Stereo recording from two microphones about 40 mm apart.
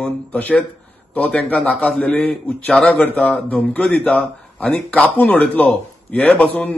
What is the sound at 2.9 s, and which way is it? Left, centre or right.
A man's voice, left.